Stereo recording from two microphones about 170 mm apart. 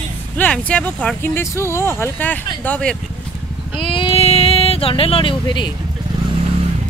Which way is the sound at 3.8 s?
30° left (ahead or behind).